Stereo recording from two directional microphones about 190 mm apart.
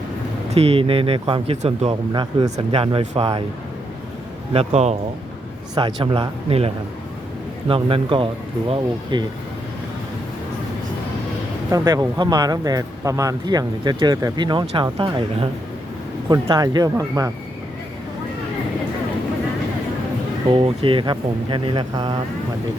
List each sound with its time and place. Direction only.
0.5 s speech: 30° right (ahead or behind)
4.5 s speech: 35° right (ahead or behind)
5.7 s speech: 25° right (ahead or behind)
7.7 s speech: 30° right (ahead or behind)
11.7 s speech: 20° right (ahead or behind)
20.5 s speech: 25° right (ahead or behind)